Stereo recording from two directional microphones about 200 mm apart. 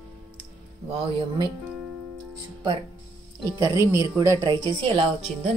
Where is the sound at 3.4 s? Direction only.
15° right (ahead or behind).